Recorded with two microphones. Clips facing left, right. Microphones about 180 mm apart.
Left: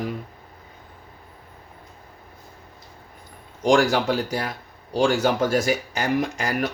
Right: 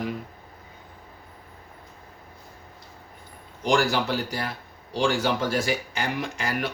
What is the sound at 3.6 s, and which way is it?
Speech, 45° left (ahead or behind).